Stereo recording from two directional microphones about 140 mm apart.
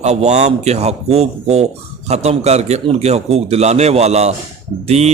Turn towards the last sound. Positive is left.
turn(degrees=-50)  # may be behind; listen again after turning